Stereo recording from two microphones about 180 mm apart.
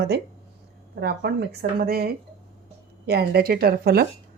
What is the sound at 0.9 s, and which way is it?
Speech, 65° right (ahead or behind).